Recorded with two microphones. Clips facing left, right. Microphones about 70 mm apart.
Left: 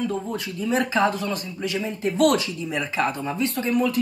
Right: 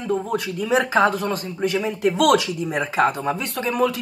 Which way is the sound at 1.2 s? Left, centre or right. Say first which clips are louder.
Right 4 dB; right.